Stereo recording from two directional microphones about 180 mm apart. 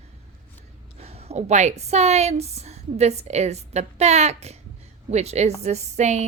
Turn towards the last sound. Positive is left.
turn(degrees=-40)  # may be behind; listen again after turning